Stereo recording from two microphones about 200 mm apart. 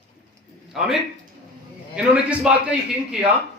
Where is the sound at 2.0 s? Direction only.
5° right (ahead or behind).